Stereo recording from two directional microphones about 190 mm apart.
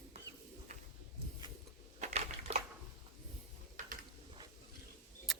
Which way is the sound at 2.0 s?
35° right (ahead or behind).